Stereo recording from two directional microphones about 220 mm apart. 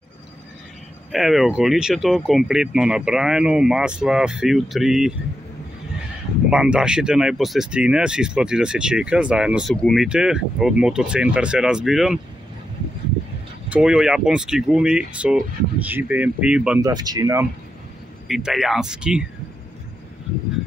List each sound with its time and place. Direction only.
1.1 s speech: centre (ahead or behind)
6.5 s speech: 5° right (ahead or behind)
13.7 s speech: 5° right (ahead or behind)
16.8 s speech: 15° right (ahead or behind)
18.3 s speech: centre (ahead or behind)